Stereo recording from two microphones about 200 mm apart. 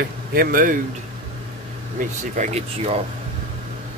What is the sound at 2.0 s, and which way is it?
Speech, 40° right (ahead or behind).